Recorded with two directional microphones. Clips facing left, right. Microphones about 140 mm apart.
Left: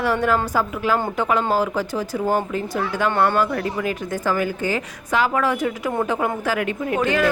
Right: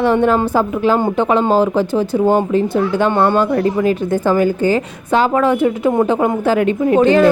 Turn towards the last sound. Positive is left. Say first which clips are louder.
# right 9 dB
turn(degrees=-30)  # may be behind; listen again after turning